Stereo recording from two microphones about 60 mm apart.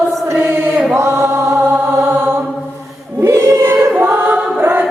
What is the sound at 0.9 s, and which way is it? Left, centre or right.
Chant, right.